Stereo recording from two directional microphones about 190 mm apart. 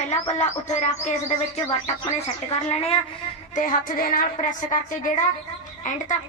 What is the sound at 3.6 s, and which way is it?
A woman's voice, 45° left (ahead or behind).